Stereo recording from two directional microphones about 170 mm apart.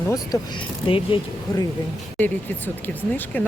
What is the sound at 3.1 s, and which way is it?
Speech, 10° left (ahead or behind).